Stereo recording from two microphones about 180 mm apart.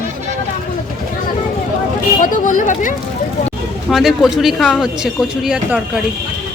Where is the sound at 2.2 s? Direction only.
45° left (ahead or behind).